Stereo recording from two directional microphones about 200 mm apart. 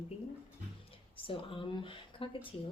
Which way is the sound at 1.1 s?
25° left (ahead or behind).